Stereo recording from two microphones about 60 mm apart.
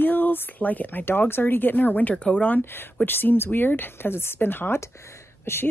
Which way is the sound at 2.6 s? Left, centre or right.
Left.